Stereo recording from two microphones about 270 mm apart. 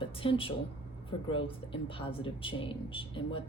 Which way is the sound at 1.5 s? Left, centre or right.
Centre.